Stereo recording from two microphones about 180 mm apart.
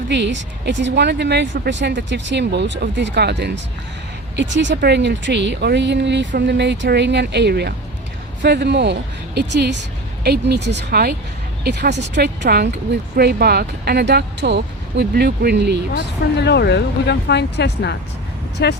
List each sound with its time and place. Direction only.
0.1 s speech: 70° right (ahead or behind)
4.4 s a woman's voice: 80° right
16.2 s speech: 70° left (ahead or behind)